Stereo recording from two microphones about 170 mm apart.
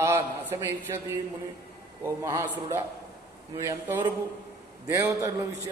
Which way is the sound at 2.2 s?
20° right (ahead or behind).